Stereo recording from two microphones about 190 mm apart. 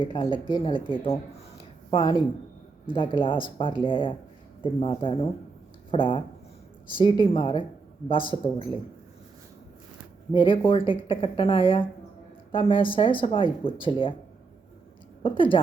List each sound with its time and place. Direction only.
0.0 s speech: 25° left (ahead or behind)
1.9 s speech: 25° left (ahead or behind)
10.3 s speech: 25° left (ahead or behind)
15.2 s speech: 25° left (ahead or behind)